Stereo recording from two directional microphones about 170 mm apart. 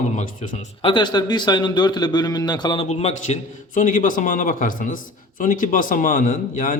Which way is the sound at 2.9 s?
40° left (ahead or behind).